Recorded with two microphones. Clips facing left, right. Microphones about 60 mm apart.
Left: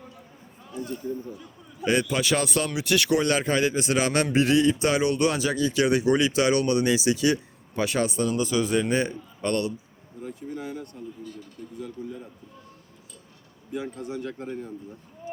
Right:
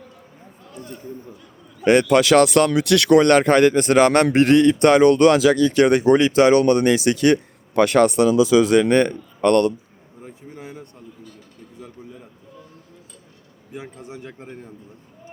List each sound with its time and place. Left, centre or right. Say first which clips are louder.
1.8 s speech: right 9 dB; right
5.6 s speech: right 7 dB; right
10.2 s a sound: left 3 dB; right
13.7 s a man's voice: left 3 dB; right